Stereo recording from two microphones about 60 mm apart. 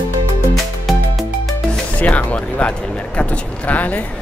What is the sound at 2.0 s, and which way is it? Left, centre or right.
Music, left.